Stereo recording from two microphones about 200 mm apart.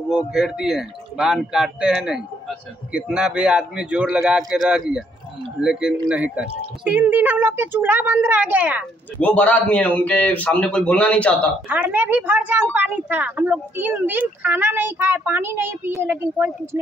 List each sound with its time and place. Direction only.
0.3 s a man's voice: centre (ahead or behind)
9.2 s a man's voice: 5° left (ahead or behind)
11.7 s speech: 10° right (ahead or behind)